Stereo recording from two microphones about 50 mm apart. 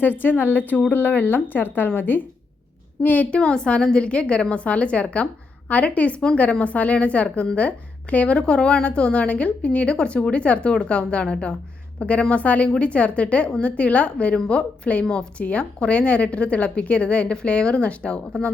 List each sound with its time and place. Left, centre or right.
0.0 s speech: left
3.2 s a woman's voice: left
15.0 s a woman's voice: centre
15.4 s a woman's voice: left